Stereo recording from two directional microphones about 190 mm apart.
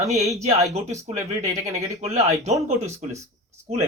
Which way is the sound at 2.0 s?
35° right (ahead or behind).